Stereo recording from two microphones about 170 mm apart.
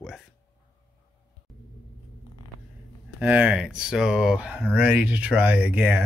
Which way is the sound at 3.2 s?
10° right (ahead or behind).